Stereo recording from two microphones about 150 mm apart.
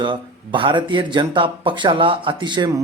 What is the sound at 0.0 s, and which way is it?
Speech, 35° right (ahead or behind).